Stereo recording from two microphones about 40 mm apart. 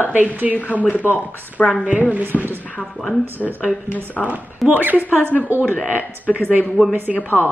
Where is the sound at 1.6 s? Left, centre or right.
Left.